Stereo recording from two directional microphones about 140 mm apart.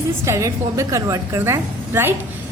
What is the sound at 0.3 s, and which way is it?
A woman's voice, 20° right (ahead or behind).